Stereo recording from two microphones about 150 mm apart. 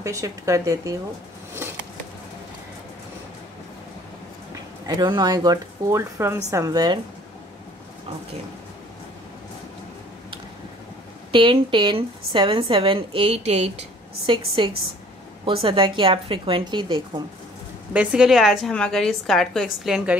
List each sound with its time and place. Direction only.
0.0 s speech: 20° right (ahead or behind)
4.8 s speech: 30° right (ahead or behind)
11.3 s a woman's voice: 35° right (ahead or behind)
14.3 s a woman's voice: 35° right (ahead or behind)
17.9 s a woman's voice: 5° right (ahead or behind)